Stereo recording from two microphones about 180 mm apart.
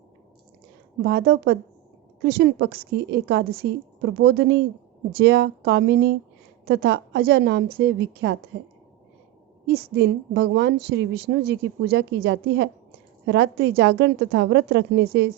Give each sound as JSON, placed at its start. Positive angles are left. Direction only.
{"t": 1.0, "sound": "a woman's voice", "side_deg": -65}
{"t": 9.6, "sound": "a woman's voice", "side_deg": -65}